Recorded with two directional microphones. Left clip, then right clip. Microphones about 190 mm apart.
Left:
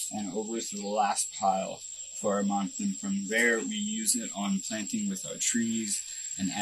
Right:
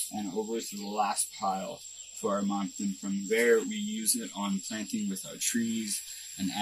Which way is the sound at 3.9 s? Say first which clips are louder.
Left 2 dB; 45° left (ahead or behind).